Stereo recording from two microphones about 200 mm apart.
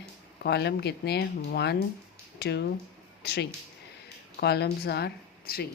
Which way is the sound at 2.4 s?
55° left (ahead or behind).